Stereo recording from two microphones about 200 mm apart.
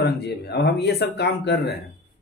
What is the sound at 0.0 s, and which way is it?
Speech, 55° left (ahead or behind).